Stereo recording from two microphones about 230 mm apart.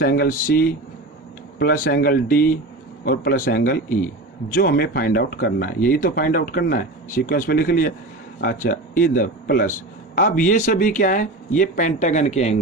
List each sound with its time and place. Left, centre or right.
0.0 s speech: left